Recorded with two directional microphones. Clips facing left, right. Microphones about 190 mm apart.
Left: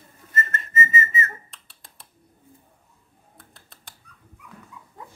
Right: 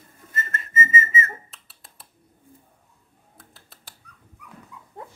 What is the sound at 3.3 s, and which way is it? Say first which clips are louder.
Typing: even; centre (ahead or behind).